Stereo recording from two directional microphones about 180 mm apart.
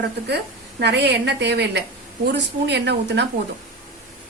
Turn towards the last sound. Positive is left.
turn(degrees=-70)  # may be behind; listen again after turning